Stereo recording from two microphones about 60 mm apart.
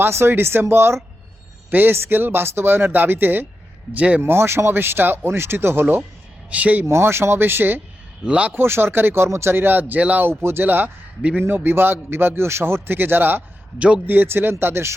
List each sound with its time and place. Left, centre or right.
0.0 s a man's voice: right
3.9 s speech: right
4.2 s a man's voice: right
6.5 s speech: right
6.8 s a man's voice: right
8.2 s speech: centre
8.5 s a man's voice: right
10.2 s a man's voice: right
13.7 s speech: centre
14.1 s a man's voice: right